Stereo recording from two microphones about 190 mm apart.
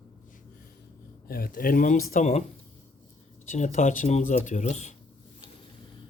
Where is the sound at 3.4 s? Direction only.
40° left (ahead or behind).